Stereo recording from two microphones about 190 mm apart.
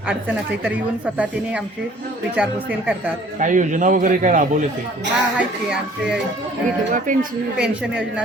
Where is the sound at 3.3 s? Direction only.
40° right (ahead or behind).